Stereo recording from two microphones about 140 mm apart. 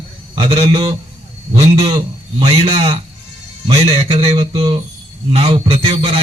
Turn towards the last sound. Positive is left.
turn(degrees=-45)  # may be behind; listen again after turning